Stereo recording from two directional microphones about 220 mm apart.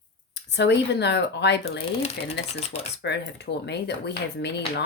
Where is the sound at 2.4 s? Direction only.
30° left (ahead or behind).